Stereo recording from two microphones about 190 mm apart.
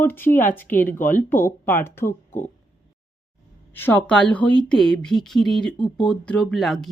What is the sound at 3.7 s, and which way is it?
Speech, 10° left (ahead or behind).